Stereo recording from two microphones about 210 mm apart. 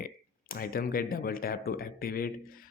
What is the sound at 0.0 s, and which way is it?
Speech, 45° left (ahead or behind).